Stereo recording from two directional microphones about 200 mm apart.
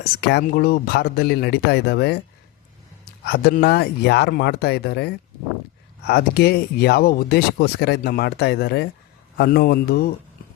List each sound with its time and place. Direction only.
0.0 s speech: 55° left (ahead or behind)
3.2 s speech: 55° left (ahead or behind)